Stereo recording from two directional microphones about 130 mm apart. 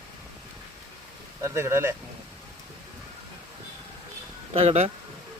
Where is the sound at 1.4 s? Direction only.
20° right (ahead or behind).